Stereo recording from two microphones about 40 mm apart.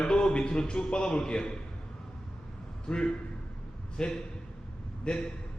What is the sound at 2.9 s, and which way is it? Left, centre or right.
A man's voice, left.